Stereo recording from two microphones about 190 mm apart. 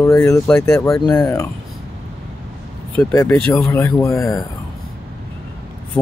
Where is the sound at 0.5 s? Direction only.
5° left (ahead or behind).